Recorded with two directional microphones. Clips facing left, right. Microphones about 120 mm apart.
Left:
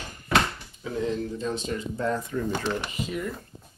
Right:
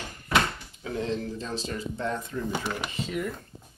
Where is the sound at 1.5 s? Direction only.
25° right (ahead or behind).